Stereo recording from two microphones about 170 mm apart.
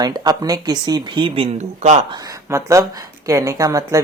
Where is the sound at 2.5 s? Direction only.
15° right (ahead or behind).